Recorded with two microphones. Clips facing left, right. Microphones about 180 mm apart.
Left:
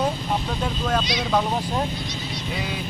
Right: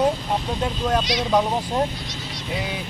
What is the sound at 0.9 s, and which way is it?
Speech, 15° right (ahead or behind).